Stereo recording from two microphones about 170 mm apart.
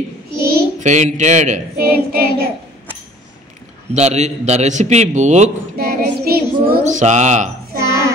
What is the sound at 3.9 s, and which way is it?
A man's voice, 40° right (ahead or behind).